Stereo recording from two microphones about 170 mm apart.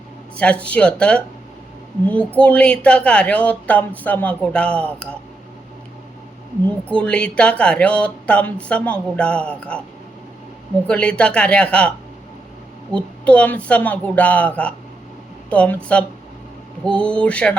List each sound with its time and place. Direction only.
0.3 s speech: 5° left (ahead or behind)
6.9 s speech: 5° left (ahead or behind)
10.8 s speech: 5° left (ahead or behind)
13.0 s speech: 5° left (ahead or behind)